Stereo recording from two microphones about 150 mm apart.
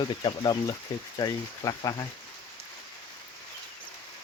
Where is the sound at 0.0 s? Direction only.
30° left (ahead or behind).